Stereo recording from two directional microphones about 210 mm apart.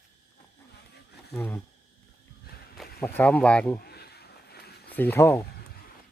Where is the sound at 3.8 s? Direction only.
50° left (ahead or behind).